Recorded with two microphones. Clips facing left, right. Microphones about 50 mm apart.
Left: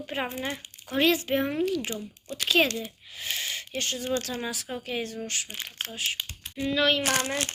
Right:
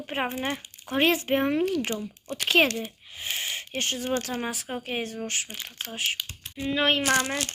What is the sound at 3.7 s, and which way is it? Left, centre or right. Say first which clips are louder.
Speech: right 1 dB; right.